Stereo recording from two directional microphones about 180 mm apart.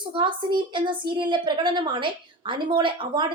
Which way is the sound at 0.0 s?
25° right (ahead or behind).